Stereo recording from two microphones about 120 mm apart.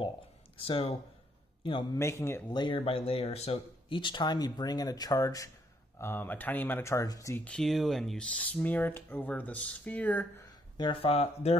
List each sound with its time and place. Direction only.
0.6 s a man's voice: 50° left (ahead or behind)
1.9 s speech: 25° left (ahead or behind)
2.5 s speech: 40° left (ahead or behind)
2.8 s speech: 55° left (ahead or behind)
3.9 s speech: 40° left (ahead or behind)
5.9 s speech: 20° left (ahead or behind)
7.4 s speech: 5° left (ahead or behind)
10.5 s speech: 45° left (ahead or behind); by 11.5 s 60° left (ahead or behind)